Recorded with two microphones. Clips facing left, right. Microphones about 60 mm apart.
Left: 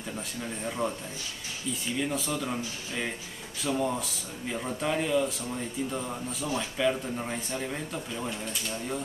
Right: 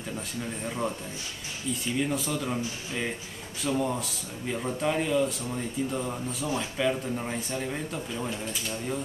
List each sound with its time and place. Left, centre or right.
0.7 s speech: centre